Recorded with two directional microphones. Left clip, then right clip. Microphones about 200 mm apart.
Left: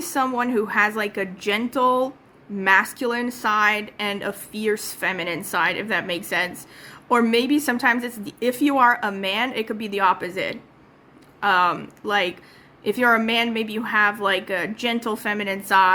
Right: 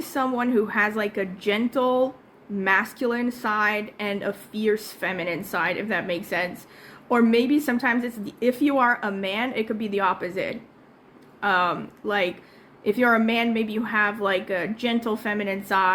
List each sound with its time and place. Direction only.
0.0 s a woman's voice: 15° left (ahead or behind)